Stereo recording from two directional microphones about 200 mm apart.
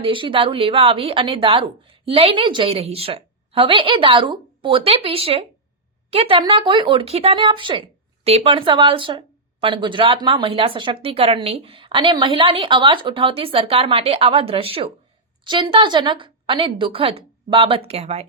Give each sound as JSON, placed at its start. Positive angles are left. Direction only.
{"t": 0.0, "sound": "speech", "side_deg": -25}